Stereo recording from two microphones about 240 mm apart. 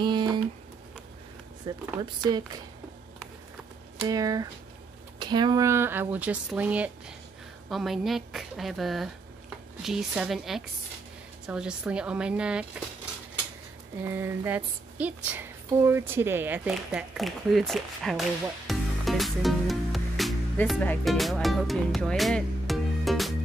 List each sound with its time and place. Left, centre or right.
0.0 s a sound: centre
1.6 s speech: centre
4.1 s a woman's voice: centre
14.0 s speech: centre
18.7 s music: centre